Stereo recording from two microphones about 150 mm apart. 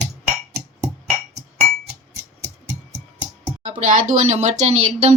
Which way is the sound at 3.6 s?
55° right (ahead or behind).